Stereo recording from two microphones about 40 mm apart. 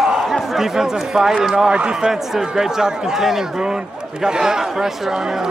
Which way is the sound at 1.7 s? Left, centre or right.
Right.